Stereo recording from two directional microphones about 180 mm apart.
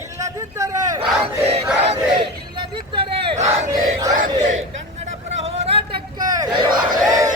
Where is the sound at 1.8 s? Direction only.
35° right (ahead or behind).